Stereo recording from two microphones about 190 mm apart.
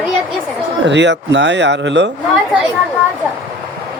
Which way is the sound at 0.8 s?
65° right (ahead or behind).